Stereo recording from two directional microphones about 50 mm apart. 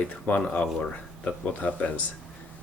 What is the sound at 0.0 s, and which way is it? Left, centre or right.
Speech, left.